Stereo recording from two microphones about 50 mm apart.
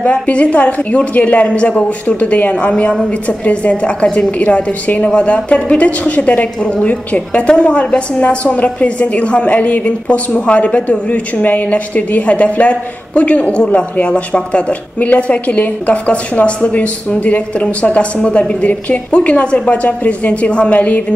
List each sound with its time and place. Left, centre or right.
0.0 s a woman's voice: left
2.9 s a woman's voice: centre